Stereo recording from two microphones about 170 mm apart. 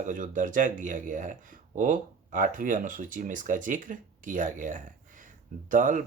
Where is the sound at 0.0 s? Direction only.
50° right (ahead or behind).